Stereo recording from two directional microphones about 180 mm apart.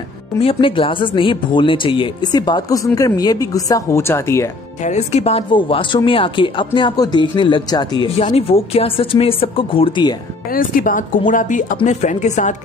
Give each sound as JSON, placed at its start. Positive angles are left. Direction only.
{"t": 0.4, "sound": "speech", "side_deg": 30}
{"t": 4.8, "sound": "speech", "side_deg": 40}
{"t": 10.5, "sound": "speech", "side_deg": 50}